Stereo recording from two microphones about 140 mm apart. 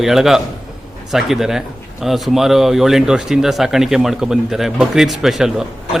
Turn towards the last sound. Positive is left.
turn(degrees=0)  # may be behind; listen again after turning